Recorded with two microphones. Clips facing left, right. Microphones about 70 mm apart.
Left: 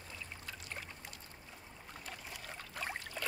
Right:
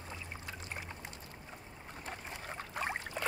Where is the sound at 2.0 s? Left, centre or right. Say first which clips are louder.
Right 5 dB; right.